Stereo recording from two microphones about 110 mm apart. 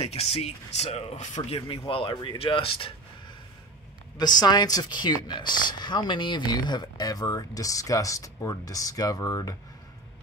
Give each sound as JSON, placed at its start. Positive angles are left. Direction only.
{"t": 0.0, "sound": "speech", "side_deg": 65}
{"t": 1.9, "sound": "speech", "side_deg": 55}
{"t": 4.2, "sound": "speech", "side_deg": 40}